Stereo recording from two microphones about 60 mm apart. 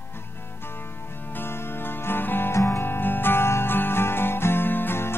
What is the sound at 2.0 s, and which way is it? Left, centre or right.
Music, left.